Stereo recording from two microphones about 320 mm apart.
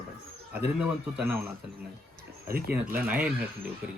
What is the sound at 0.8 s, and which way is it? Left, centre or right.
Speech, centre.